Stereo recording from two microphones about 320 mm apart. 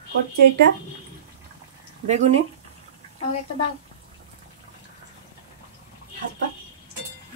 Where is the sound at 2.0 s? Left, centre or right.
Right.